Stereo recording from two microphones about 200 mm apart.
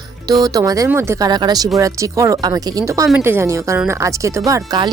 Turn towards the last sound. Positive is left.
turn(degrees=-20)  # may be behind; listen again after turning